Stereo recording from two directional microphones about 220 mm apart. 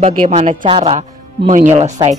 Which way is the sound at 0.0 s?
30° right (ahead or behind).